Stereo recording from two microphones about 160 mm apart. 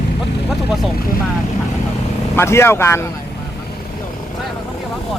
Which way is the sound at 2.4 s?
15° left (ahead or behind).